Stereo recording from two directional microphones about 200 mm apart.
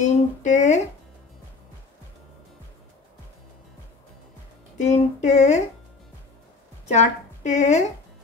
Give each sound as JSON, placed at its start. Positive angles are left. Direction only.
{"t": 0.0, "sound": "speech", "side_deg": 35}
{"t": 4.7, "sound": "child singing", "side_deg": 35}
{"t": 6.9, "sound": "speech", "side_deg": 35}